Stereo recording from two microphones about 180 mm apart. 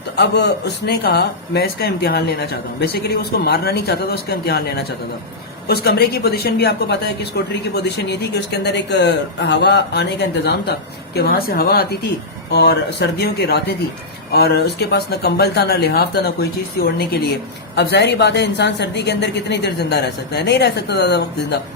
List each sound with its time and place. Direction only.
0.2 s a woman's voice: 70° left (ahead or behind)